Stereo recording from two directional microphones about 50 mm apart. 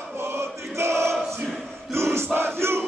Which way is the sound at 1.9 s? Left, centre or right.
Right.